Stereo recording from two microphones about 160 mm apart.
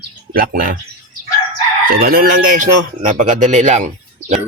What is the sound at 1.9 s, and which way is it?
Chicken, 70° right (ahead or behind).